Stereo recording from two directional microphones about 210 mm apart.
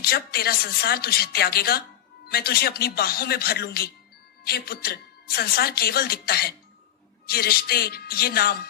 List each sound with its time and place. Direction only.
0.0 s a woman's voice: 45° left (ahead or behind)